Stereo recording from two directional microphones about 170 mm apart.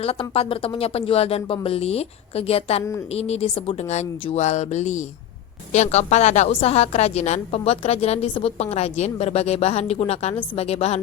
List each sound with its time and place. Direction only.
0.0 s a woman's voice: 35° left (ahead or behind)